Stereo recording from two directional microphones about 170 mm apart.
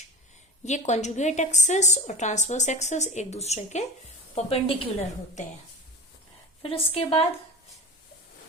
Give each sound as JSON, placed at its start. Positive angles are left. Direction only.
{"t": 0.6, "sound": "a woman's voice", "side_deg": 40}
{"t": 6.6, "sound": "a woman's voice", "side_deg": 35}